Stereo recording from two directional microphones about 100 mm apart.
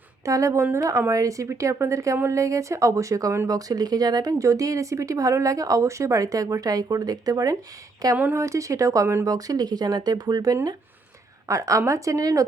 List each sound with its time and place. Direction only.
0.3 s speech: 30° right (ahead or behind)
8.1 s speech: 25° right (ahead or behind)